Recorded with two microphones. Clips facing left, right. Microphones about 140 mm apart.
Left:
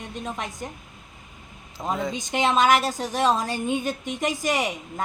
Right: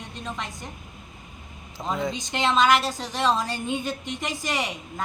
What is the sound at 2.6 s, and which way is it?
Speech, 45° left (ahead or behind).